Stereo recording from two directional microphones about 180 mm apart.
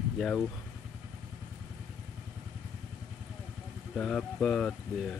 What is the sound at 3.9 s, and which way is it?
Speech, 5° left (ahead or behind).